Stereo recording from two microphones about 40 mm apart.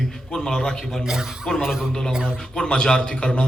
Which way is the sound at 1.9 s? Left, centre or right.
Centre.